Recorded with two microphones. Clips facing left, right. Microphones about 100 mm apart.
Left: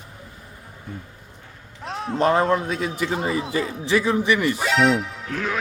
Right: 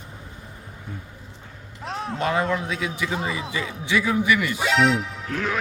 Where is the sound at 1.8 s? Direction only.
Centre (ahead or behind).